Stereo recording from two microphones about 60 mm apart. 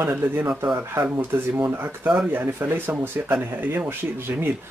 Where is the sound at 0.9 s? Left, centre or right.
Right.